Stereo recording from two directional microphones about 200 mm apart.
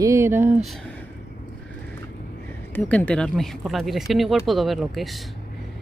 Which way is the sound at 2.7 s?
5° left (ahead or behind).